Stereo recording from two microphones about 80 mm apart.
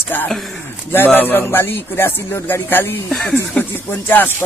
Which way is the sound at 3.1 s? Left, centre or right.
Centre.